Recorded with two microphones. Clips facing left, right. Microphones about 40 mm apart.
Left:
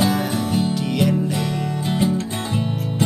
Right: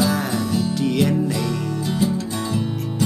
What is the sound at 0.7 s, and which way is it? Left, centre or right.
Music, centre.